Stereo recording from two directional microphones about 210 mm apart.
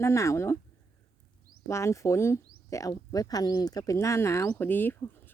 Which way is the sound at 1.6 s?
15° left (ahead or behind).